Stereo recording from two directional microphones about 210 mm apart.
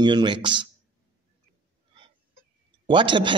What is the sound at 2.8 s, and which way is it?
Speech, 20° right (ahead or behind).